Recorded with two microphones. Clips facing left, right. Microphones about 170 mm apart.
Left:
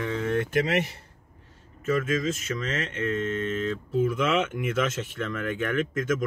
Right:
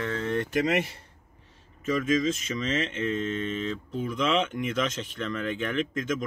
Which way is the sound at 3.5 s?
5° left (ahead or behind).